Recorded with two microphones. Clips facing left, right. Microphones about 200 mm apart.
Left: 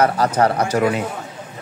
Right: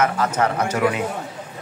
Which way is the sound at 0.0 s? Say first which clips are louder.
Left 4 dB; 35° left (ahead or behind).